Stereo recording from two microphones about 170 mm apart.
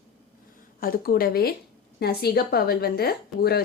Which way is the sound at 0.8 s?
60° left (ahead or behind).